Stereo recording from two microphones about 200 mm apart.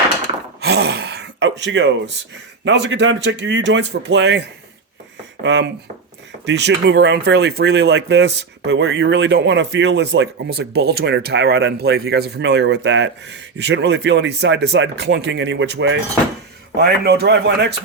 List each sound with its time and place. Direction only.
0.6 s throat clearing: 55° right (ahead or behind)
2.6 s speech: 65° right (ahead or behind)
16.7 s speech: 55° right (ahead or behind)